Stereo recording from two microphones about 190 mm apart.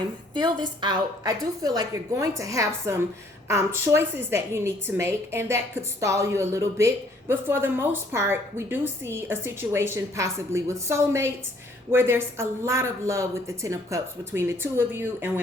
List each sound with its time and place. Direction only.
0.3 s a woman's voice: 25° right (ahead or behind)